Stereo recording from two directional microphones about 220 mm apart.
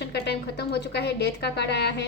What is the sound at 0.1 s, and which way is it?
A woman's voice, 50° left (ahead or behind).